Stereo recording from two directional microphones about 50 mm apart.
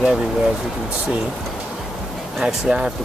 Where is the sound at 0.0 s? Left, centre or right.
Centre.